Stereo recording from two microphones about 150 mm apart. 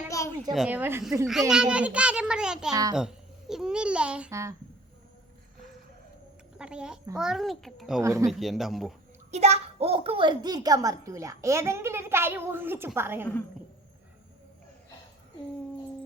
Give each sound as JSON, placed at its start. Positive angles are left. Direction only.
{"t": 0.1, "sound": "a sound", "side_deg": 20}
{"t": 0.5, "sound": "a child's voice", "side_deg": -10}
{"t": 4.3, "sound": "a child's voice", "side_deg": -20}
{"t": 6.6, "sound": "a child's voice", "side_deg": -5}
{"t": 8.0, "sound": "a child's voice", "side_deg": -20}
{"t": 8.3, "sound": "a child's voice", "side_deg": 0}
{"t": 9.3, "sound": "a child's voice", "side_deg": -45}